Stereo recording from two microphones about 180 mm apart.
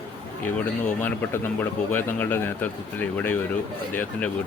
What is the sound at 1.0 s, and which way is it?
Speech, 10° left (ahead or behind).